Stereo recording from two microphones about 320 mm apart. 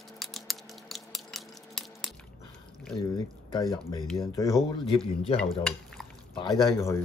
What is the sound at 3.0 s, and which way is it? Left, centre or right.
Speech, centre.